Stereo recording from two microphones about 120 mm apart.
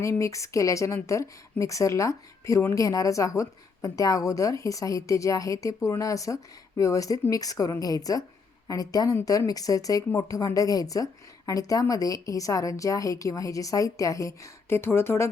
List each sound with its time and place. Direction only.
0.0 s a woman's voice: 25° left (ahead or behind)